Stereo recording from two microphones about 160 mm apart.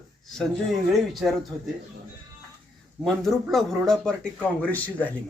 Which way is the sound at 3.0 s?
Centre (ahead or behind).